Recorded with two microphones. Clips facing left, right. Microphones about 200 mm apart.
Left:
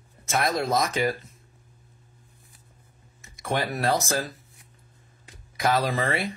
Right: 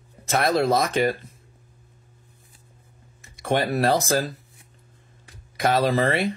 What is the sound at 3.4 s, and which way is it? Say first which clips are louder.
Speech: right 5 dB; 30° right (ahead or behind).